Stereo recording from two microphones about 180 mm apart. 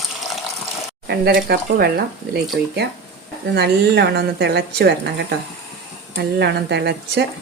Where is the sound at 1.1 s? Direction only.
65° right (ahead or behind).